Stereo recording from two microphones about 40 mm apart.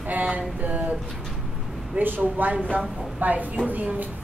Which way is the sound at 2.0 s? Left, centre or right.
Right.